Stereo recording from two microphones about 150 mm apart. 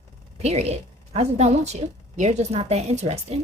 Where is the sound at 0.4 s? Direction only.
45° right (ahead or behind).